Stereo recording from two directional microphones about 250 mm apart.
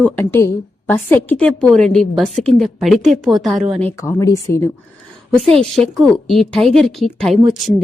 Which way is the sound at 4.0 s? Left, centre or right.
Centre.